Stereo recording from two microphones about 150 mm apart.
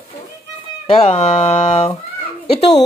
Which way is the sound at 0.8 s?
40° left (ahead or behind).